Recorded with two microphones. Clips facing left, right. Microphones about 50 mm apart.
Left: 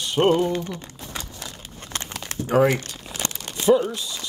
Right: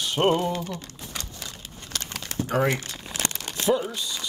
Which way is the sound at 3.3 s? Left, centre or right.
Centre.